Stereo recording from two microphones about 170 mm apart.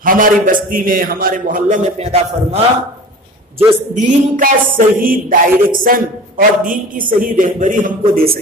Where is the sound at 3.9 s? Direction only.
50° right (ahead or behind).